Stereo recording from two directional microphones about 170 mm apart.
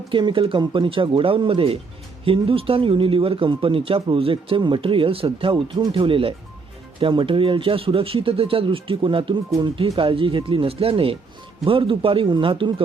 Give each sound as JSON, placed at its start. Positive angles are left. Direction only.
{"t": 0.1, "sound": "speech", "side_deg": -30}